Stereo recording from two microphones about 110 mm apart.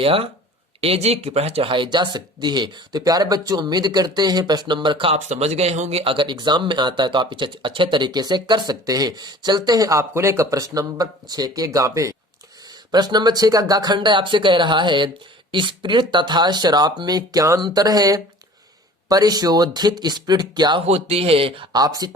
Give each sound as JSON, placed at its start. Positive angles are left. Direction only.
{"t": 0.0, "sound": "speech", "side_deg": -60}
{"t": 5.1, "sound": "speech", "side_deg": -80}
{"t": 20.8, "sound": "speech", "side_deg": -70}
{"t": 21.7, "sound": "speech", "side_deg": -35}